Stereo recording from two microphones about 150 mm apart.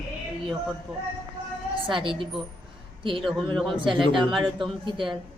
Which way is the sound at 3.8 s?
30° right (ahead or behind).